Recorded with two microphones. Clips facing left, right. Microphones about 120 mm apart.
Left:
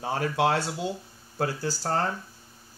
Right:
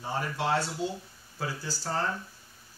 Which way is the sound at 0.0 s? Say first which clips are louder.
Left 6 dB; 75° left (ahead or behind).